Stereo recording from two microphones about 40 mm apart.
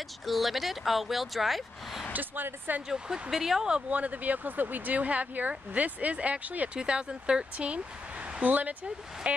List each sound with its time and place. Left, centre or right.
0.3 s speech: centre
2.1 s speech: right
2.9 s speech: centre
3.9 s speech: right
6.7 s speech: right